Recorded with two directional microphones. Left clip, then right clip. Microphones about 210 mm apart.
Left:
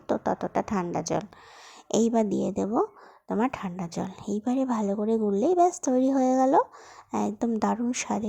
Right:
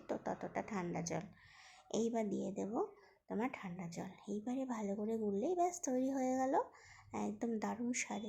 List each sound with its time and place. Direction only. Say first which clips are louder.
0.1 s speech: left 15 dB; 35° left (ahead or behind)